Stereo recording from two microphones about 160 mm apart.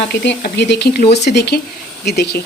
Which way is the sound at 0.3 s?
90° left.